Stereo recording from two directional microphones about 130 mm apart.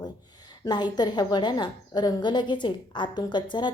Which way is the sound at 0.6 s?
35° left (ahead or behind).